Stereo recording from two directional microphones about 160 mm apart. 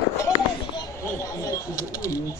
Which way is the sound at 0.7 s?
20° left (ahead or behind).